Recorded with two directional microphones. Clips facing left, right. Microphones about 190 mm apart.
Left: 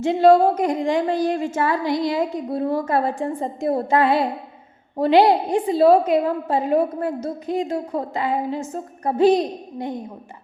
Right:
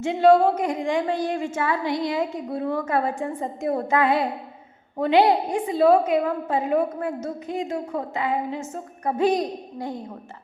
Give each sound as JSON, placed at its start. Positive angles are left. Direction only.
{"t": 0.0, "sound": "a woman's voice", "side_deg": 35}